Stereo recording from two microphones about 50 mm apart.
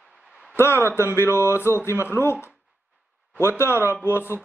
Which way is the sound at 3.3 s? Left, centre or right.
Left.